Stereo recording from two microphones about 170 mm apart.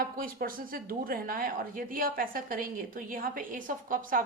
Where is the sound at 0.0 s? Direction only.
55° right (ahead or behind).